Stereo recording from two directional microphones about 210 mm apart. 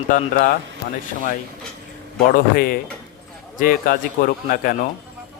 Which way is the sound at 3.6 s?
40° left (ahead or behind).